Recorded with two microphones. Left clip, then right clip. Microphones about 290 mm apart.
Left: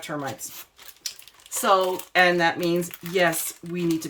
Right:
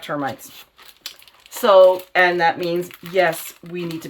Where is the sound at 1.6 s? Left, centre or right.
Centre.